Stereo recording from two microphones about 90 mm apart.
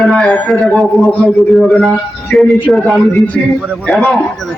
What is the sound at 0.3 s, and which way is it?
A man's voice, 15° left (ahead or behind).